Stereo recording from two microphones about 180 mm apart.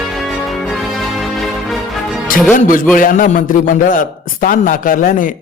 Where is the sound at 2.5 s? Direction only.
50° left (ahead or behind).